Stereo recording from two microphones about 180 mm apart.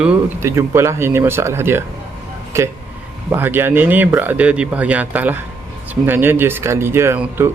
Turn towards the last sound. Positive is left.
turn(degrees=-15)  # may be behind; listen again after turning